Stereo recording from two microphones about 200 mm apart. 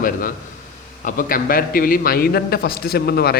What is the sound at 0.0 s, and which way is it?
A man's voice, 45° left (ahead or behind).